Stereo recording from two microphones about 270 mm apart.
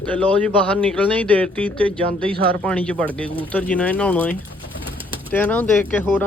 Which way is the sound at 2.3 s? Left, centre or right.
Centre.